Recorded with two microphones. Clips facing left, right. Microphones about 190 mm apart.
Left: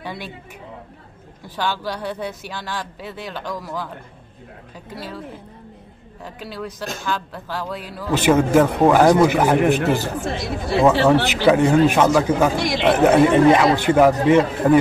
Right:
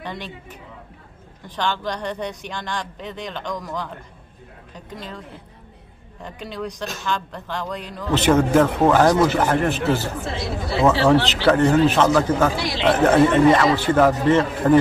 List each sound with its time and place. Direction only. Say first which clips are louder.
0.0 s speech: left 1 dB; 10° left (ahead or behind)
1.4 s speech: even; 5° left (ahead or behind)
6.2 s a man's voice: right 1 dB; 5° left (ahead or behind)
12.5 s speech: left 4 dB; 50° left (ahead or behind)
12.8 s a man's voice: left 1 dB; 10° left (ahead or behind)